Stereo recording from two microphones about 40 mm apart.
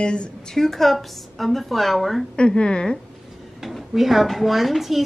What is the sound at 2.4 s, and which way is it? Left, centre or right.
Speech, left.